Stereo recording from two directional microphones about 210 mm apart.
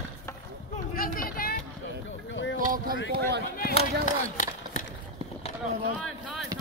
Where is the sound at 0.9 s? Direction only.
40° left (ahead or behind).